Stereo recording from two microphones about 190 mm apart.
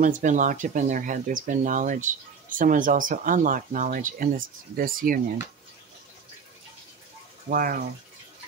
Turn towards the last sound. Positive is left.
turn(degrees=-50)  # may be behind; listen again after turning